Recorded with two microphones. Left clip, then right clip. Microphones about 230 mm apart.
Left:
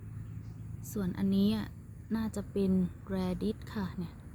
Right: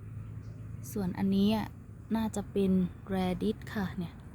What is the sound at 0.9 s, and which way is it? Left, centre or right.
A woman's voice, centre.